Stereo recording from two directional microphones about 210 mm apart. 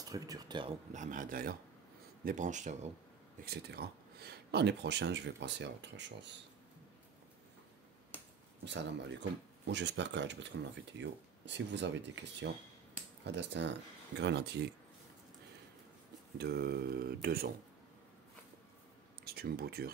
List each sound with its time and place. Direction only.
0.1 s speech: 20° right (ahead or behind)
0.9 s speech: 40° right (ahead or behind)
3.4 s speech: 50° right (ahead or behind)
8.6 s speech: 55° right (ahead or behind)
16.3 s speech: 50° right (ahead or behind)
19.2 s speech: 50° right (ahead or behind)